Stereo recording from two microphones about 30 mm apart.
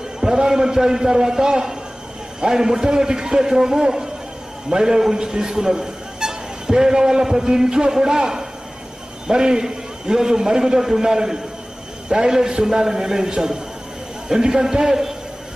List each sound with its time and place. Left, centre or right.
0.2 s a man's voice: centre